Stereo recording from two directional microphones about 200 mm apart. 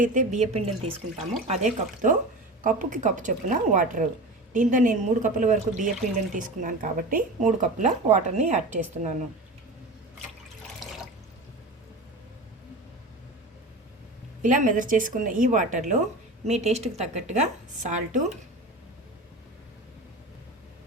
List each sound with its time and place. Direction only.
0.0 s speech: 40° right (ahead or behind)
14.4 s speech: 40° right (ahead or behind)